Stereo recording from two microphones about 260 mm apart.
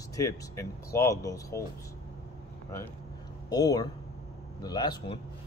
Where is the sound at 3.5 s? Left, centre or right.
Centre.